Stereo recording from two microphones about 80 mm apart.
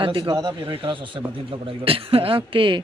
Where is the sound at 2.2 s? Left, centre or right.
Right.